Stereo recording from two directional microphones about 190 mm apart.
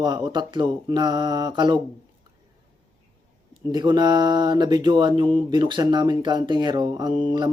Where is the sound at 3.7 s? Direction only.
20° right (ahead or behind).